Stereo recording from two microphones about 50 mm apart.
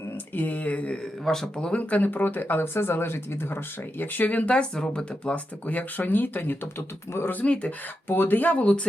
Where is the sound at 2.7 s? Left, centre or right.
Left; by 5.4 s centre.